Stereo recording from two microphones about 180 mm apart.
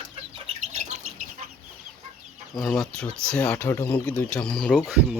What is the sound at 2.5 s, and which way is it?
Speech, centre (ahead or behind).